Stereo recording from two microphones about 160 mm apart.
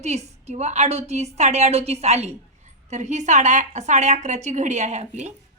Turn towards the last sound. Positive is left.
turn(degrees=-45)  # may be behind; listen again after turning